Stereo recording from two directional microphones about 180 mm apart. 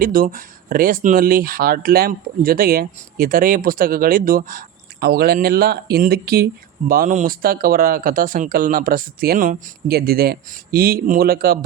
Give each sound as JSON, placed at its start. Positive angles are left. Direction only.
{"t": 0.0, "sound": "speech", "side_deg": -50}